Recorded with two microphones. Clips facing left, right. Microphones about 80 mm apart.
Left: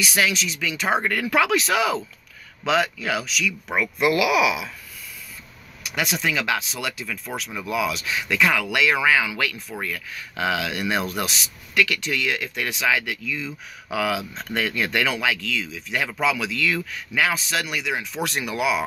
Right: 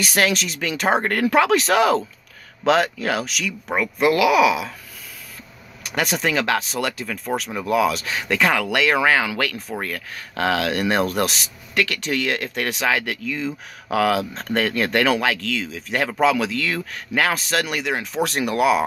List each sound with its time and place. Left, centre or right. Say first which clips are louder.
0.0 s speech: right 3 dB; right
3.7 s speech: right 3 dB; right
5.9 s speech: right 3 dB; right